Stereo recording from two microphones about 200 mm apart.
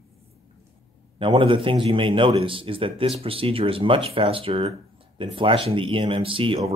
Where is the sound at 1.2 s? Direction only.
25° right (ahead or behind).